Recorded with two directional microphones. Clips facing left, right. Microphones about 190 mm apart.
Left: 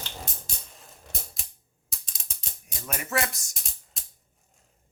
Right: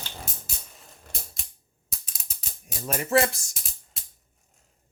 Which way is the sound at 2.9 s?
35° right (ahead or behind).